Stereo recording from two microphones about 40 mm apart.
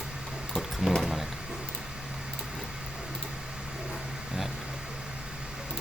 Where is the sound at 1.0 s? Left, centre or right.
Centre.